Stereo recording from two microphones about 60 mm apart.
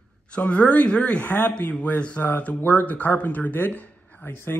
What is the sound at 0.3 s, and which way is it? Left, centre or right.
Speech, left.